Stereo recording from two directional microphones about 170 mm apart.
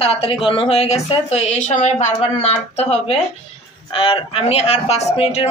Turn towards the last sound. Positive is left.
turn(degrees=35)  # may be behind; listen again after turning